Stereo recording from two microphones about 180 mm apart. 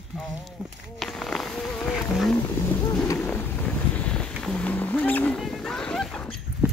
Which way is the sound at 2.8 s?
15° left (ahead or behind).